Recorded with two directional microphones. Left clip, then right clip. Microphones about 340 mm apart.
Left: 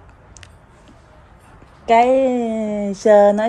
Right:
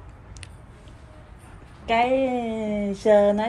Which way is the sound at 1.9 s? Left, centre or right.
Left.